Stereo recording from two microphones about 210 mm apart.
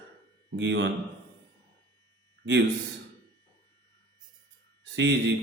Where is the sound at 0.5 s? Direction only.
60° right (ahead or behind).